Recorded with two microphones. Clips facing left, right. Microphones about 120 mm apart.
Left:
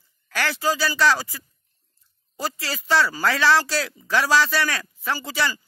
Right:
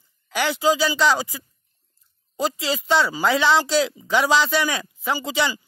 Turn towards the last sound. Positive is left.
turn(degrees=-15)  # may be behind; listen again after turning